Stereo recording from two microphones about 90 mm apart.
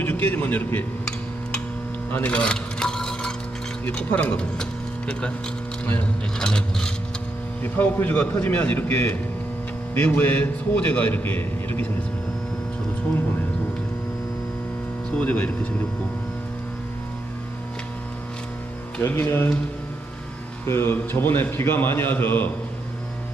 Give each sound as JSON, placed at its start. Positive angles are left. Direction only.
{"t": 0.0, "sound": "a man's voice", "side_deg": 20}
{"t": 2.1, "sound": "a sound", "side_deg": 15}
{"t": 3.9, "sound": "a man's voice", "side_deg": 15}
{"t": 4.5, "sound": "vehicle", "side_deg": 10}
{"t": 5.8, "sound": "a man's voice", "side_deg": 15}
{"t": 7.6, "sound": "a man's voice", "side_deg": 20}
{"t": 15.2, "sound": "a man's voice", "side_deg": 20}
{"t": 19.1, "sound": "speech", "side_deg": 25}
{"t": 20.7, "sound": "speech", "side_deg": 25}